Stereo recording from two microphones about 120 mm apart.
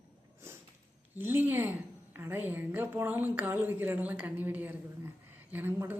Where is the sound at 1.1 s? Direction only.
15° right (ahead or behind).